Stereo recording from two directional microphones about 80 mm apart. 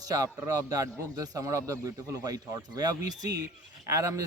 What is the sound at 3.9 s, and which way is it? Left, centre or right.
Speech, right.